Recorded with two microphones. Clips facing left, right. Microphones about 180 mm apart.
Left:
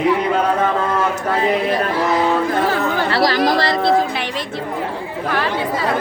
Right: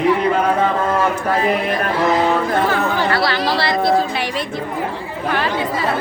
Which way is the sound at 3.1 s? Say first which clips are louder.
Left 3 dB; 40° left (ahead or behind).